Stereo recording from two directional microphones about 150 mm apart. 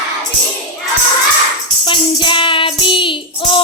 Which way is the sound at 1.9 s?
35° left (ahead or behind).